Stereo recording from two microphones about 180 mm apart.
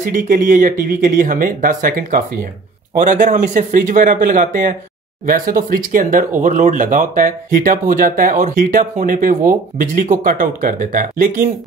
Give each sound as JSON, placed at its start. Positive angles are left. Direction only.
{"t": 0.0, "sound": "speech", "side_deg": -50}